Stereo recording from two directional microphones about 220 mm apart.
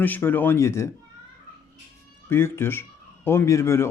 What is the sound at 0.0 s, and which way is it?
Speech, 10° left (ahead or behind).